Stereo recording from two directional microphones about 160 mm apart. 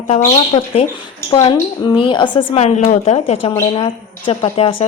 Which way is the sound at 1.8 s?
30° left (ahead or behind).